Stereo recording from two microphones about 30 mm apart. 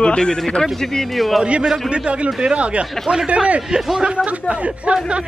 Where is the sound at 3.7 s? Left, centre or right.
Right.